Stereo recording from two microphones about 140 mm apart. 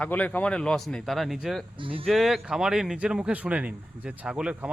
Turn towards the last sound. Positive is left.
turn(degrees=-10)  # may be behind; listen again after turning